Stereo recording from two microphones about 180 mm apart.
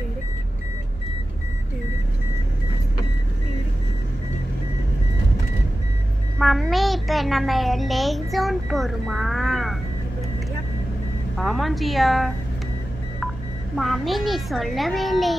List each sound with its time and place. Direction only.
6.4 s a child's voice: centre (ahead or behind)
11.3 s a child's voice: centre (ahead or behind)
13.7 s a child's voice: centre (ahead or behind)